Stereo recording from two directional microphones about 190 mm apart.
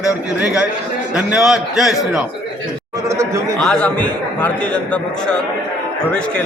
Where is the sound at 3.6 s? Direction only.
5° left (ahead or behind).